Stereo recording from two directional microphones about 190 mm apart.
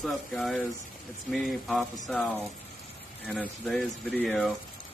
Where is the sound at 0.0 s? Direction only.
Centre (ahead or behind).